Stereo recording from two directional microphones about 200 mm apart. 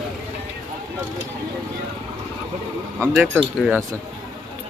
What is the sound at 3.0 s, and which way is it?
Speech, 5° right (ahead or behind).